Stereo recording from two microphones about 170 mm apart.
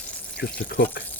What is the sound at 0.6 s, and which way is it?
Speech, 70° left (ahead or behind).